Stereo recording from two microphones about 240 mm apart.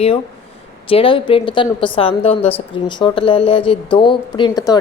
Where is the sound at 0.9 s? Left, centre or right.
Left.